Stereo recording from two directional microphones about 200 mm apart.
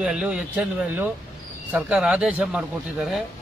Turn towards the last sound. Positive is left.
turn(degrees=-5)  # may be behind; listen again after turning